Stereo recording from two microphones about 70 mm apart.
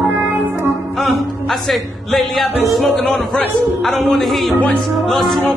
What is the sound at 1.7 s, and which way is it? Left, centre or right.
Speech, centre.